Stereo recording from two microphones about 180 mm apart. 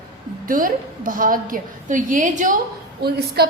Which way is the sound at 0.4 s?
50° right (ahead or behind).